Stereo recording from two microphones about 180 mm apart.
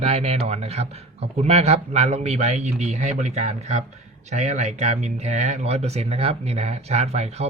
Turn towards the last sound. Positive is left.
turn(degrees=-35)  # may be behind; listen again after turning